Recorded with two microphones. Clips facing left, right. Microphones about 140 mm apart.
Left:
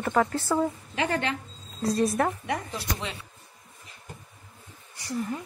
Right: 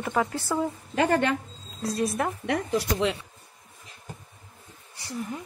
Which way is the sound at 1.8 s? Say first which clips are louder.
Left 3 dB; 5° right (ahead or behind).